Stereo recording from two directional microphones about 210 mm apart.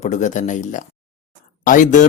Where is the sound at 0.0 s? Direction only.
35° left (ahead or behind).